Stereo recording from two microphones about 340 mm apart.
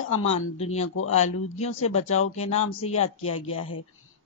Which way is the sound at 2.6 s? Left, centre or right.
Left.